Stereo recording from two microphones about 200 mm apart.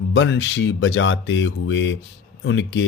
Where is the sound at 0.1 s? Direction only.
60° left (ahead or behind).